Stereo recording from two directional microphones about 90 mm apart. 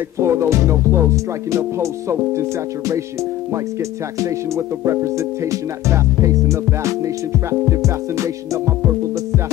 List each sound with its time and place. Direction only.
0.2 s speech: 30° right (ahead or behind)
4.2 s speech: 35° right (ahead or behind)